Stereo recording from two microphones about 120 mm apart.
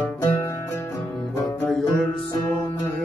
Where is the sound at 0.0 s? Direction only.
20° left (ahead or behind).